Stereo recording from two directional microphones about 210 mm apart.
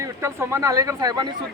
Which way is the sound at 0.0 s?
15° right (ahead or behind).